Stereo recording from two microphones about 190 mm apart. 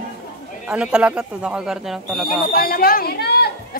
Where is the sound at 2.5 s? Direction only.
50° left (ahead or behind).